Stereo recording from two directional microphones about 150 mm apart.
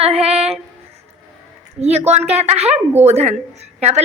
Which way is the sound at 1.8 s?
45° right (ahead or behind).